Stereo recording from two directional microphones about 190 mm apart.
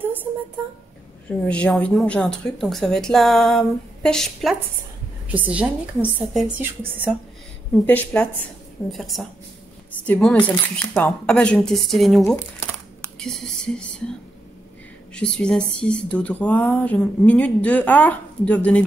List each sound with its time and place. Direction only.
1.5 s a woman's voice: 5° left (ahead or behind)
7.8 s speech: 10° left (ahead or behind)
15.1 s speech: 5° left (ahead or behind)